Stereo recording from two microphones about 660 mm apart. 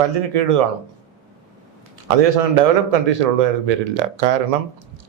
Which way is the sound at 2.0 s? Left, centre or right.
Right.